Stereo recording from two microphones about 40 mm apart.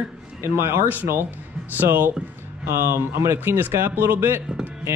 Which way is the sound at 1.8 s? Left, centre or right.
Right.